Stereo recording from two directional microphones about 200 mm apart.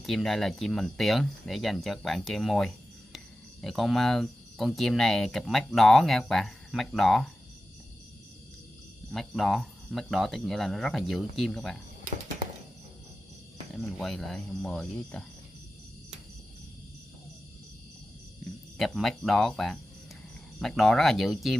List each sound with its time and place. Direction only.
0.0 s speech: centre (ahead or behind)
9.1 s speech: centre (ahead or behind)
13.7 s speech: centre (ahead or behind)
18.8 s speech: centre (ahead or behind)